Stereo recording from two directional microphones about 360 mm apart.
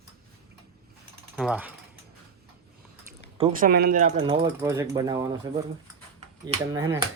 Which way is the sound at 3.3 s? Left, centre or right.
Centre.